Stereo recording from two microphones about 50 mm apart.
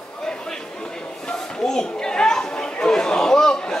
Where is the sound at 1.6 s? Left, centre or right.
Centre.